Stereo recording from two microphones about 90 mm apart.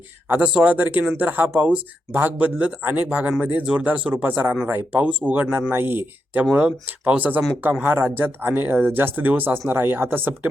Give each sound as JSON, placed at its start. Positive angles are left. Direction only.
{"t": 0.3, "sound": "speech", "side_deg": -15}
{"t": 6.4, "sound": "speech", "side_deg": -10}